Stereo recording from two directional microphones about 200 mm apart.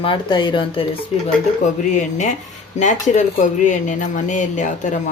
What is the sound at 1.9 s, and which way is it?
Speech, 35° left (ahead or behind).